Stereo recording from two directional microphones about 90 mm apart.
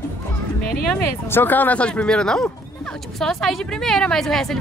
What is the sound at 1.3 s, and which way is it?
A woman's voice, 20° left (ahead or behind).